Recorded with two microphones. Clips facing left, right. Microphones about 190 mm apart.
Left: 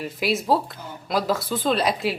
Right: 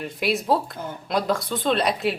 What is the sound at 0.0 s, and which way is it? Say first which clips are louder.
Speech: even; centre (ahead or behind).